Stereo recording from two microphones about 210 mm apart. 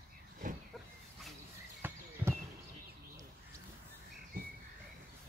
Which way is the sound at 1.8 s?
10° right (ahead or behind).